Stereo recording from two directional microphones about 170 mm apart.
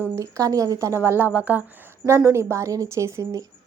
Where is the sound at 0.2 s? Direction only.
20° right (ahead or behind).